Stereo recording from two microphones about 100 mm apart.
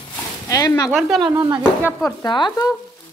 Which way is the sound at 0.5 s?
35° left (ahead or behind).